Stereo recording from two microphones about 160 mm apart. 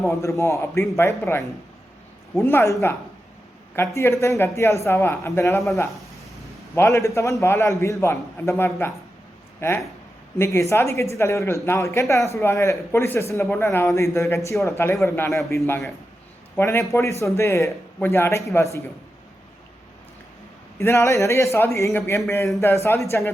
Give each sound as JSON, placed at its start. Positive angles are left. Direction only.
{"t": 0.1, "sound": "speech", "side_deg": 20}
{"t": 3.8, "sound": "speech", "side_deg": 15}
{"t": 6.7, "sound": "speech", "side_deg": 20}
{"t": 20.7, "sound": "speech", "side_deg": 15}